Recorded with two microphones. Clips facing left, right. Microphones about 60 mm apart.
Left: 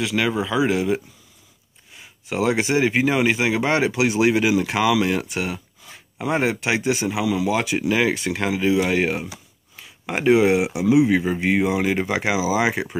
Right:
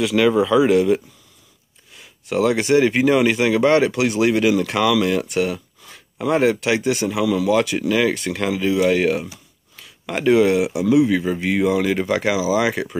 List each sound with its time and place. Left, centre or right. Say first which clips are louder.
0.0 s speech: right 6 dB; centre